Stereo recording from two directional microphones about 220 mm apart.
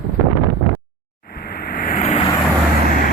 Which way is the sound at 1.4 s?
45° left (ahead or behind).